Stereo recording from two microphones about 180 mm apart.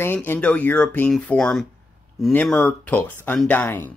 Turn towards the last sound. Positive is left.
turn(degrees=10)  # may be behind; listen again after turning